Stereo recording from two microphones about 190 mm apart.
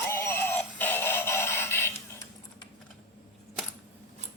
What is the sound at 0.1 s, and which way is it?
Synthetic singing, 10° left (ahead or behind).